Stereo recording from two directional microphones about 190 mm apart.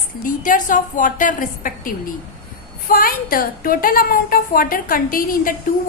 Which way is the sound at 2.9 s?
50° left (ahead or behind).